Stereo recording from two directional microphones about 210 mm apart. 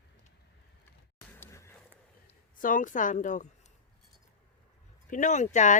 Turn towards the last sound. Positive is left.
turn(degrees=35)  # may be behind; listen again after turning